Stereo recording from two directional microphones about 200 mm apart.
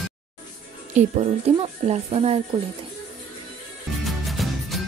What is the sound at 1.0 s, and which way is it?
A woman's voice, 30° right (ahead or behind).